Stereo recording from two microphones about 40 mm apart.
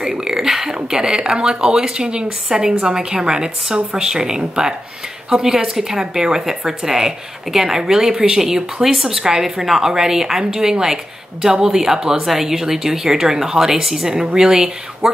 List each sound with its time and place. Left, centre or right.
0.0 s a woman's voice: centre